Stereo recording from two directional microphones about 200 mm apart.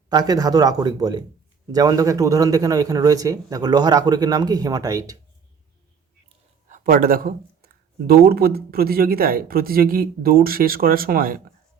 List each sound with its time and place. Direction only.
0.1 s a man's voice: 20° right (ahead or behind)
6.2 s speech: 40° right (ahead or behind)